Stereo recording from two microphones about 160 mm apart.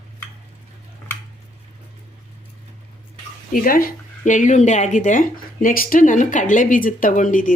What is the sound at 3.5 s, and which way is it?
Speech, 65° left (ahead or behind).